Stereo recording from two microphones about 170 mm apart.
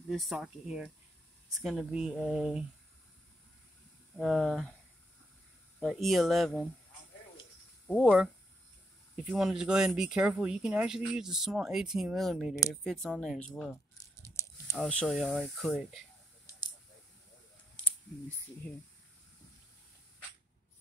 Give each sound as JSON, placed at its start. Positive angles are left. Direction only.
{"t": 0.1, "sound": "speech", "side_deg": 0}
{"t": 4.2, "sound": "speech", "side_deg": 0}
{"t": 5.8, "sound": "speech", "side_deg": 0}
{"t": 7.8, "sound": "speech", "side_deg": 5}
{"t": 13.9, "sound": "a sound", "side_deg": 15}
{"t": 14.8, "sound": "speech", "side_deg": 5}